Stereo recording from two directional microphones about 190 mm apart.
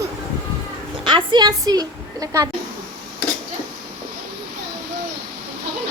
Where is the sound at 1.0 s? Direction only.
25° right (ahead or behind).